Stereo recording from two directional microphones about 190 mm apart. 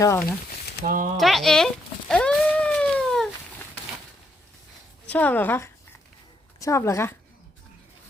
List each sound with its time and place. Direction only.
0.0 s speech: 15° left (ahead or behind)
0.9 s speech: 45° right (ahead or behind)
1.1 s a sound: centre (ahead or behind)
5.1 s speech: 10° left (ahead or behind)